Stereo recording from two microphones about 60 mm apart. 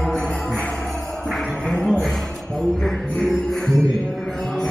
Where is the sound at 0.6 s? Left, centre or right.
Centre.